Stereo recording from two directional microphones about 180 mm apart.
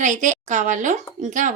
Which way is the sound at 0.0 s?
45° right (ahead or behind).